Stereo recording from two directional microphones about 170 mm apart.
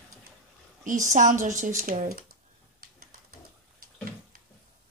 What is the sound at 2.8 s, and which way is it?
Bird, 55° right (ahead or behind).